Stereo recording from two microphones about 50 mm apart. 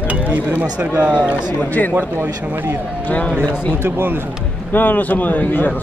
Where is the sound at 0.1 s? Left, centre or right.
Right.